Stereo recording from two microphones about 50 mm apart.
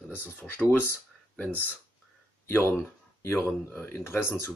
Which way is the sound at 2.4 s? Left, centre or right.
Left.